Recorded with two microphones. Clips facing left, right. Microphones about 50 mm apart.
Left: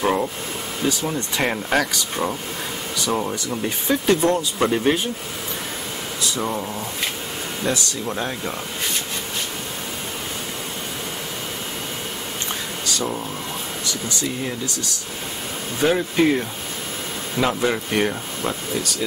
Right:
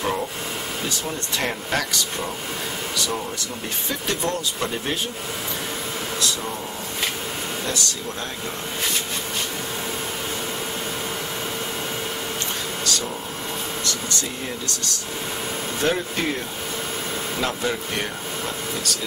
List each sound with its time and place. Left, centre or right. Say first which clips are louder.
0.0 s speech: left 4 dB; centre
3.1 s speech: left 5 dB; left
7.6 s speech: left 7 dB; left
15.8 s speech: left 6 dB; centre